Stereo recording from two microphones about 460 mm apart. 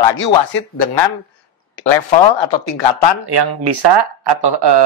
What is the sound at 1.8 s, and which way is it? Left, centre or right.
Speech, left.